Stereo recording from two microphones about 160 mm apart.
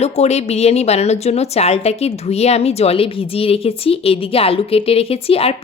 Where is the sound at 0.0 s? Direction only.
45° left (ahead or behind).